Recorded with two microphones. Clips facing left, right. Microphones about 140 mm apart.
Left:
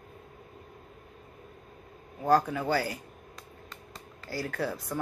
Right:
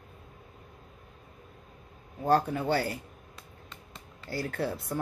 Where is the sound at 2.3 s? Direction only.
30° right (ahead or behind).